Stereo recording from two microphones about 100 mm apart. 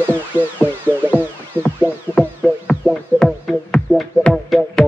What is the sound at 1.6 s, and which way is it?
Music, 20° right (ahead or behind).